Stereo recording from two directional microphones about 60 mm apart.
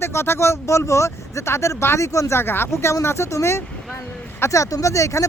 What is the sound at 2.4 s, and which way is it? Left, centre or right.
Speech, left.